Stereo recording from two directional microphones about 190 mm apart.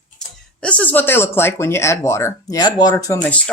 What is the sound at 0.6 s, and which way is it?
Speech, 5° left (ahead or behind).